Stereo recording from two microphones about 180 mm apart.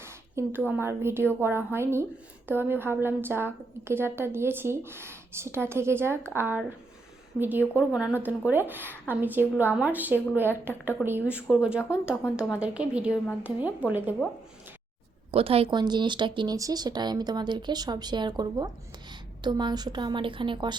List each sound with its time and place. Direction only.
0.0 s a sound: 15° right (ahead or behind)
0.7 s a woman's voice: 15° right (ahead or behind)
15.3 s speech: 30° right (ahead or behind)